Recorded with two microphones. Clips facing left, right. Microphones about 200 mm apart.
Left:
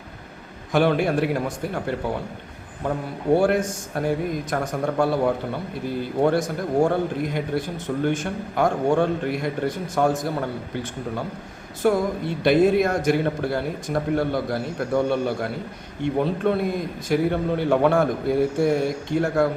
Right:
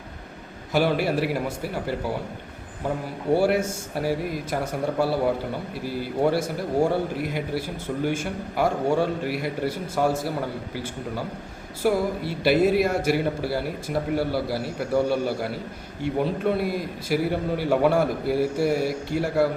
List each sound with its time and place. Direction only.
0.7 s a man's voice: 5° right (ahead or behind)
3.3 s a man's voice: 10° right (ahead or behind)
11.8 s a man's voice: 10° right (ahead or behind)